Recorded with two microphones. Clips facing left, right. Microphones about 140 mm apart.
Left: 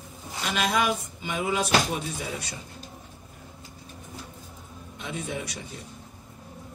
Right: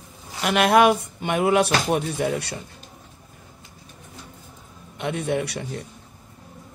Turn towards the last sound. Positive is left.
turn(degrees=-65)  # may be behind; listen again after turning